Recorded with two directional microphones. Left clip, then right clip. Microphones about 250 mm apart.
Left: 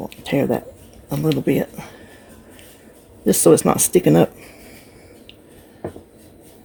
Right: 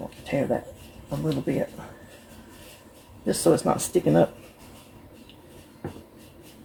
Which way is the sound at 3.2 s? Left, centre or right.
Left.